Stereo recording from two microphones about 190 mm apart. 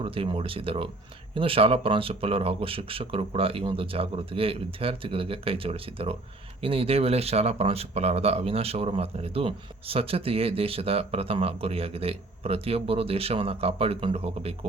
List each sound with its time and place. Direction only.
0.0 s speech: 30° right (ahead or behind)